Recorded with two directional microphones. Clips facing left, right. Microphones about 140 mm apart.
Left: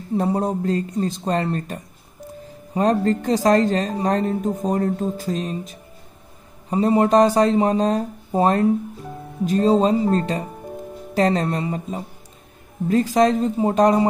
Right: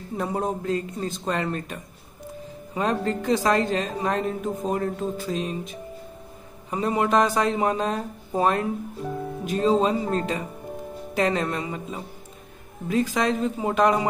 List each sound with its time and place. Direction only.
0.2 s speech: 35° left (ahead or behind)